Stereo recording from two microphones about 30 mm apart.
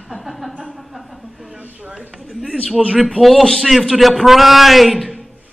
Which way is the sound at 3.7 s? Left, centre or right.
Centre.